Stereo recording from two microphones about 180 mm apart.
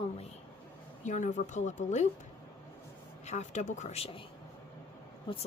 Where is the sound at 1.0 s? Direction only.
45° left (ahead or behind).